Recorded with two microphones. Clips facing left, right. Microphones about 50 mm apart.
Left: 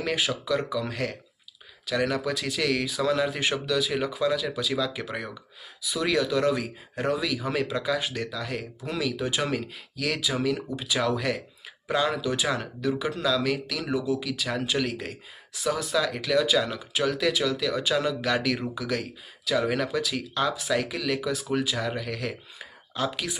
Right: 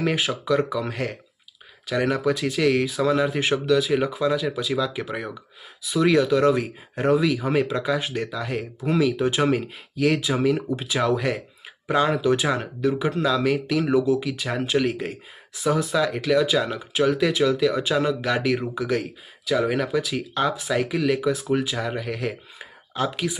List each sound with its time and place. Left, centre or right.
0.0 s speech: right
19.5 s speech: centre